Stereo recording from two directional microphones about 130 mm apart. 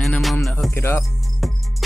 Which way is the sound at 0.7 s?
20° left (ahead or behind).